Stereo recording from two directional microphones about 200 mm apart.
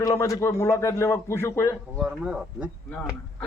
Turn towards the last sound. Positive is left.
turn(degrees=5)  # may be behind; listen again after turning